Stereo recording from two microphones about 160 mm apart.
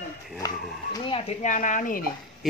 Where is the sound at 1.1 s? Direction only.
45° left (ahead or behind).